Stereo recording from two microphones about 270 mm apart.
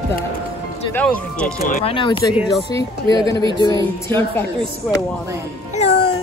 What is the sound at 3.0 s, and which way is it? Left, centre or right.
Speech, centre.